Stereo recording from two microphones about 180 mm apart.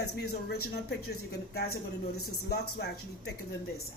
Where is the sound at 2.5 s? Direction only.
65° left (ahead or behind).